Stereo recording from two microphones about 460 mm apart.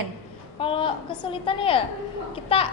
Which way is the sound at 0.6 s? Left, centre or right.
Centre.